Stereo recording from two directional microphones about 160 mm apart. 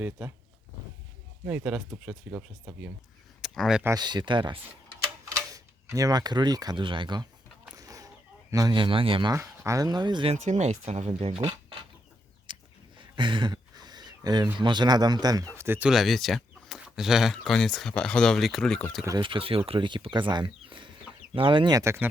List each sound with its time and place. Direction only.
1.5 s speech: 10° right (ahead or behind)
3.8 s speech: 25° right (ahead or behind)
7.8 s chicken: 20° right (ahead or behind)
9.3 s speech: 20° right (ahead or behind)
10.3 s speech: 50° right (ahead or behind)
12.5 s a sound: 30° right (ahead or behind)
14.6 s speech: 30° right (ahead or behind)
15.9 s speech: centre (ahead or behind)
19.0 s speech: 30° right (ahead or behind)